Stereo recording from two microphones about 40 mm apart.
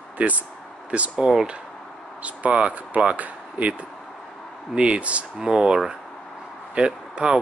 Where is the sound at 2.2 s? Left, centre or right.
Right.